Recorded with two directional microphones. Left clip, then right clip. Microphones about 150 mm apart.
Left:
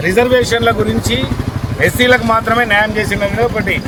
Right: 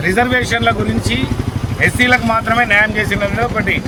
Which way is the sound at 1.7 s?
35° left (ahead or behind).